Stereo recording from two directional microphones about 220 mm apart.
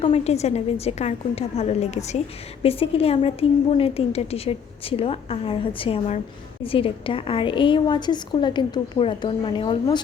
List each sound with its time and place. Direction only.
0.0 s a woman's voice: 30° left (ahead or behind)